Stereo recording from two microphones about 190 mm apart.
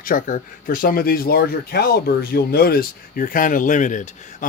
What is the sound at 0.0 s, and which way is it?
Speech, 45° left (ahead or behind).